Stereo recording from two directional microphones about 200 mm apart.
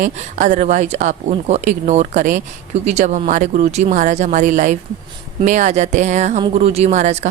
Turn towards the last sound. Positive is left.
turn(degrees=-35)  # may be behind; listen again after turning